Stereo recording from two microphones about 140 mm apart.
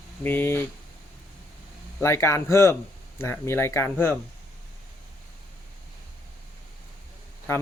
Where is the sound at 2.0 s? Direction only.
20° left (ahead or behind).